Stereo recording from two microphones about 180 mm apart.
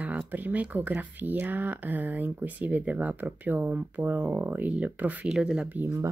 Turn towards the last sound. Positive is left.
turn(degrees=-10)  # may be behind; listen again after turning